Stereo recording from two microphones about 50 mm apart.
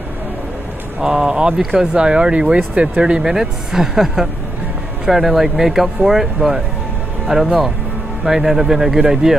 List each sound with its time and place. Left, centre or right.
1.0 s speech: centre